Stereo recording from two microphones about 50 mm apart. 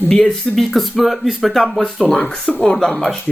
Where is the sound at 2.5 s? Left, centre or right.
Left.